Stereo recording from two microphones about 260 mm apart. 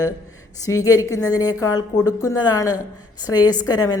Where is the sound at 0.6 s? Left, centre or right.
Centre.